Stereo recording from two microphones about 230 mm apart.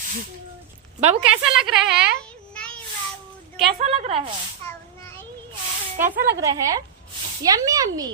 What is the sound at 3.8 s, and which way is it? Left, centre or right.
Speech, right.